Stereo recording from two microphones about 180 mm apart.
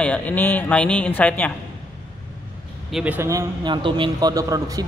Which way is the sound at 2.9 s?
10° right (ahead or behind).